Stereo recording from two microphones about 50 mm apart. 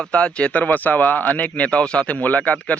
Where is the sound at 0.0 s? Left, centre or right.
Left.